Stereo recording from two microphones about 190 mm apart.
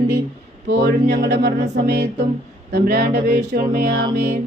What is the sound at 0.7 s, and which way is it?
Speech, 65° right (ahead or behind).